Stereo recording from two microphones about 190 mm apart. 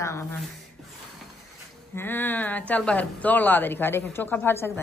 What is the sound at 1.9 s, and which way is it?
Speech, 10° left (ahead or behind).